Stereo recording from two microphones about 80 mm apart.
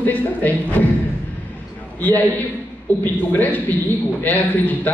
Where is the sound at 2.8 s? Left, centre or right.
Left.